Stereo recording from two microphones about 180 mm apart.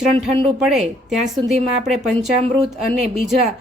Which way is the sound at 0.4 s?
Centre (ahead or behind).